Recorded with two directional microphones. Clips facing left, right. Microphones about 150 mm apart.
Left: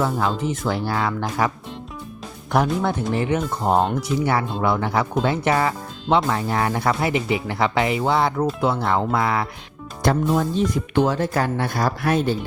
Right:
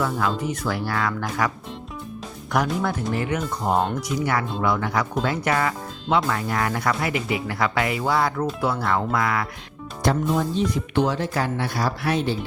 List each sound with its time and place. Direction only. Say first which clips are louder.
0.0 s speech: left 2 dB; 25° left (ahead or behind)
10.0 s speech: left 2 dB; 50° left (ahead or behind)